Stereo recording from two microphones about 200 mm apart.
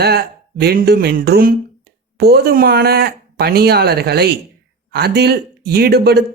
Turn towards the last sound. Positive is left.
turn(degrees=-55)  # may be behind; listen again after turning